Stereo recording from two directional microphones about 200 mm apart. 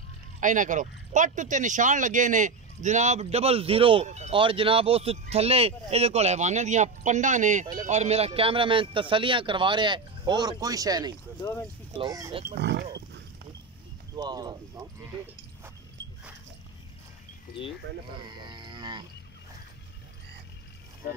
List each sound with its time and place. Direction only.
0.4 s speech: 40° right (ahead or behind); by 11.1 s 20° right (ahead or behind)
11.4 s speech: 15° left (ahead or behind)
12.0 s speech: 20° right (ahead or behind)
12.5 s speech: 55° right (ahead or behind)
14.1 s speech: 20° right (ahead or behind)
18.4 s livestock: 25° right (ahead or behind)